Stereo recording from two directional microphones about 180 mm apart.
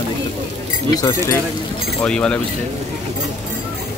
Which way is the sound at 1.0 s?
20° left (ahead or behind).